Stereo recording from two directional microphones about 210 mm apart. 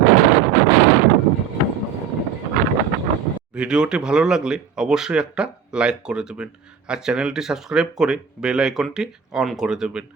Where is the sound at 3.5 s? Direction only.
5° right (ahead or behind).